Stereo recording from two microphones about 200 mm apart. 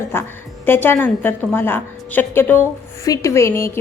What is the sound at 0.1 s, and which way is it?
A woman's voice, 10° left (ahead or behind).